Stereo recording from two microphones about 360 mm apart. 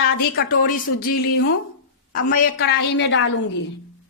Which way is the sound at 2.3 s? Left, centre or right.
Left.